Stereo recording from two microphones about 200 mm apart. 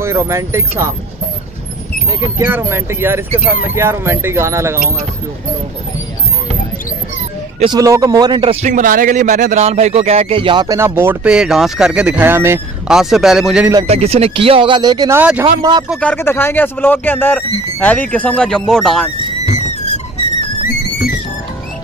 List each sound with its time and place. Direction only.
0.0 s speech: 15° right (ahead or behind)
2.0 s speech: 20° right (ahead or behind)
7.6 s speech: 20° right (ahead or behind)
8.6 s speech: 40° right (ahead or behind); by 13.7 s centre (ahead or behind)
13.8 s speech: 30° right (ahead or behind)
15.1 s speech: 10° right (ahead or behind)
15.9 s speech: 5° left (ahead or behind)
19.4 s music: 35° left (ahead or behind)